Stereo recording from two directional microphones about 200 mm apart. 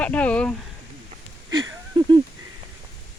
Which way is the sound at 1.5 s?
15° right (ahead or behind).